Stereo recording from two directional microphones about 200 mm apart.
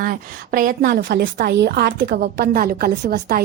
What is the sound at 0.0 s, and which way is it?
A woman's voice, 45° right (ahead or behind).